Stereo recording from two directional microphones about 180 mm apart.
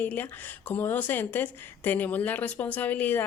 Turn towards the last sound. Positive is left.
turn(degrees=10)  # may be behind; listen again after turning